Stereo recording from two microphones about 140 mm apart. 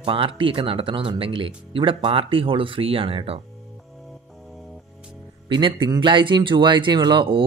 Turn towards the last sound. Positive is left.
turn(degrees=-35)  # may be behind; listen again after turning